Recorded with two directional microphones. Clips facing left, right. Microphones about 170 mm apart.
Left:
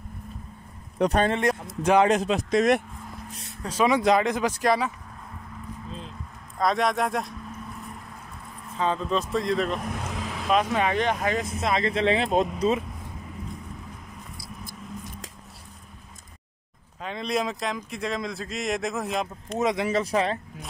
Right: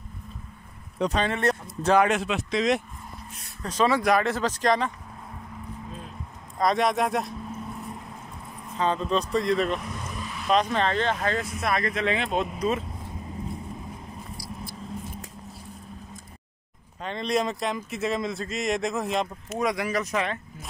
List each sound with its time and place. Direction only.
0.9 s speech: 55° left (ahead or behind)
1.4 s speech: 10° left (ahead or behind)
2.0 s speech: 35° left (ahead or behind)
3.6 s speech: 10° left (ahead or behind)
6.6 s speech: centre (ahead or behind)
8.7 s speech: centre (ahead or behind)
9.8 s vehicle: 60° left (ahead or behind); by 10.4 s 90° left
10.5 s speech: 10° left (ahead or behind); by 12.6 s 35° left (ahead or behind)
17.0 s speech: centre (ahead or behind)
19.6 s speech: 25° left (ahead or behind)